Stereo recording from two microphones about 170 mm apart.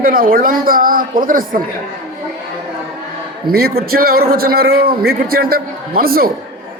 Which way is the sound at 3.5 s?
65° right (ahead or behind).